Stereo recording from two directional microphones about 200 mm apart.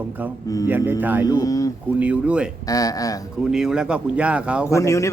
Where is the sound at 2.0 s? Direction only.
5° right (ahead or behind).